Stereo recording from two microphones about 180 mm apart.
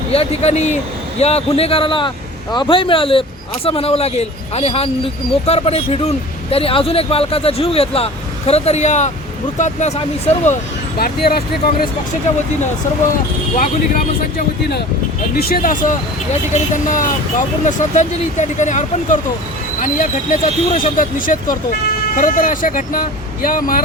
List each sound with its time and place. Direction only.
0.1 s a man's voice: 35° left (ahead or behind)
10.9 s speech: 60° left (ahead or behind)
14.3 s speech: 65° left (ahead or behind)